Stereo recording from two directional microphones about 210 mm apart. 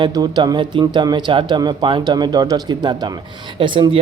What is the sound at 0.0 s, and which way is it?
Speech, 20° right (ahead or behind).